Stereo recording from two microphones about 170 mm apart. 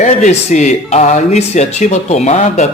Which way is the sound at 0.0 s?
45° left (ahead or behind).